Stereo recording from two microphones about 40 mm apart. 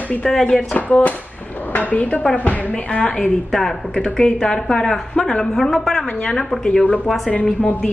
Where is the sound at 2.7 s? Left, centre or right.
Left.